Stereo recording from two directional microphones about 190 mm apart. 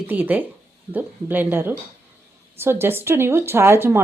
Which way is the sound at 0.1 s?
10° right (ahead or behind).